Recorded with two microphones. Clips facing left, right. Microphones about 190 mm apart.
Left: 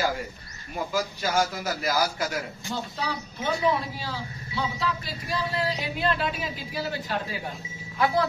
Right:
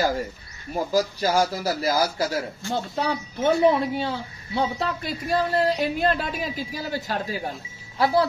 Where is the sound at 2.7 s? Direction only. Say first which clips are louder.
Right 6 dB; 55° right (ahead or behind).